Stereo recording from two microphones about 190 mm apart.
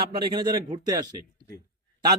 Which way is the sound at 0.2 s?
25° right (ahead or behind).